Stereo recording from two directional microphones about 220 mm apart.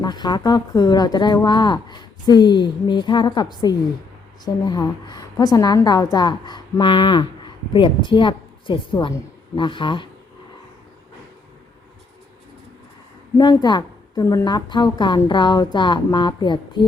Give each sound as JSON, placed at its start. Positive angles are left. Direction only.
{"t": 0.0, "sound": "a woman's voice", "side_deg": 20}
{"t": 13.3, "sound": "a woman's voice", "side_deg": 20}